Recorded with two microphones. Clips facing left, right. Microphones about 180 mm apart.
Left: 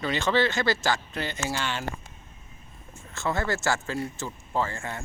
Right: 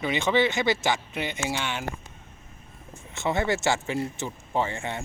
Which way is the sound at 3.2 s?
20° right (ahead or behind).